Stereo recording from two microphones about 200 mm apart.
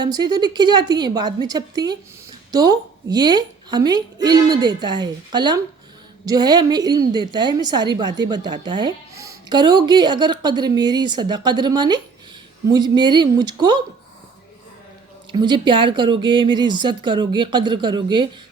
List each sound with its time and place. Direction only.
0.0 s speech: 20° right (ahead or behind)
15.3 s speech: 25° right (ahead or behind)